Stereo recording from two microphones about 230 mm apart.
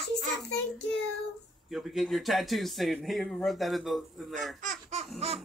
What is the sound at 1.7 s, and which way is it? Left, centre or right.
Speech, centre.